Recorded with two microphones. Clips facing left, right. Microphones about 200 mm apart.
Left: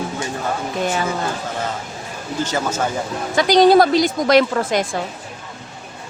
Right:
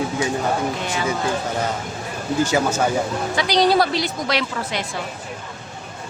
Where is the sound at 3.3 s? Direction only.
50° left (ahead or behind).